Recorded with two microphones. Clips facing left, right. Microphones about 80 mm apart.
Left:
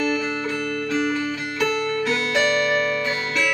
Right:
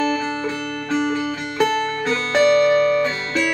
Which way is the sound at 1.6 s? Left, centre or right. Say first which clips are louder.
Right 3 dB; right.